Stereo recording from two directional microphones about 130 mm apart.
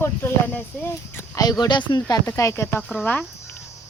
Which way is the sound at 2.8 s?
Centre (ahead or behind).